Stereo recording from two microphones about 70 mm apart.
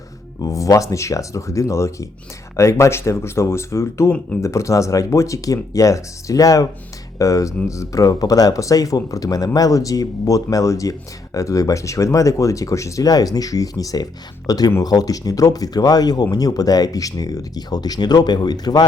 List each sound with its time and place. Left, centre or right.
0.4 s speech: left